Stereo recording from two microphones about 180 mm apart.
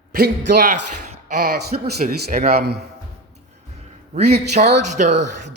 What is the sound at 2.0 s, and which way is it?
Speech, 50° right (ahead or behind).